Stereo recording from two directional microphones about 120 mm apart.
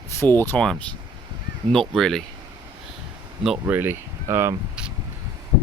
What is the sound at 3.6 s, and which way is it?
Speech, 20° right (ahead or behind).